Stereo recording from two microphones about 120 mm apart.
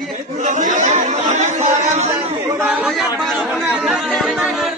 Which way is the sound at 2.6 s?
10° right (ahead or behind).